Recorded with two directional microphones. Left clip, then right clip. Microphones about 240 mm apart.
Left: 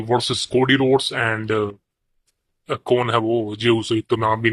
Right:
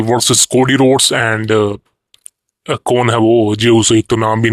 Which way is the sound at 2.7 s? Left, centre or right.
Right.